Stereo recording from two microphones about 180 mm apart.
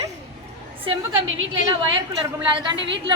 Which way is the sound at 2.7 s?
85° right.